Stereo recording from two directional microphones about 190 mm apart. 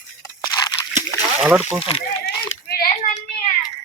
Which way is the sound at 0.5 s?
20° left (ahead or behind).